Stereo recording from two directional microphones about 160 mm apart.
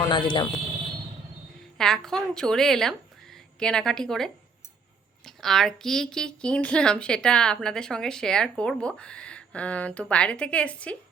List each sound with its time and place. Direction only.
0.0 s speech: 30° left (ahead or behind)
1.8 s a woman's voice: 5° left (ahead or behind)